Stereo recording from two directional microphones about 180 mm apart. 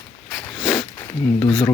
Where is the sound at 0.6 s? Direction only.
Centre (ahead or behind).